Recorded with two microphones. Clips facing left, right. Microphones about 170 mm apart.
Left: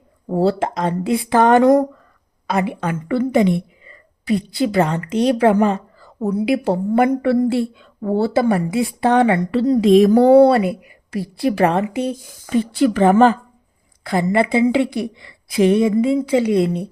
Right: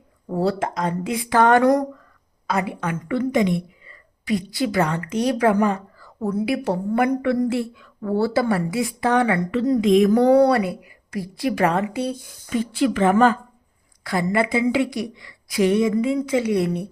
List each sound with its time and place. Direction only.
0.3 s a woman's voice: 30° left (ahead or behind)
14.0 s a woman's voice: 25° left (ahead or behind)